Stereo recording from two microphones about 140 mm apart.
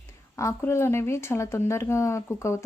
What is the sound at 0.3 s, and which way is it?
Speech, 20° left (ahead or behind).